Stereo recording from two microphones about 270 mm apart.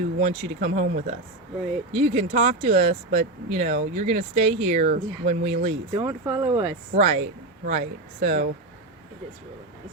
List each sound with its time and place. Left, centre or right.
0.2 s speech: right
6.0 s speech: centre
6.9 s speech: right